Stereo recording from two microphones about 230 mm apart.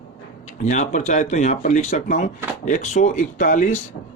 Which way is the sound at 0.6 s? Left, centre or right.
Left.